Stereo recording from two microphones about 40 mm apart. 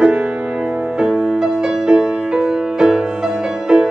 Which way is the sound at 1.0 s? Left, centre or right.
Centre.